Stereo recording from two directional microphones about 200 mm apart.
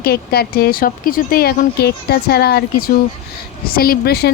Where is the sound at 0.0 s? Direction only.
50° left (ahead or behind).